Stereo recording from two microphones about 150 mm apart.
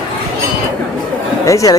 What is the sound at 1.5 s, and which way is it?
Speech, 20° left (ahead or behind).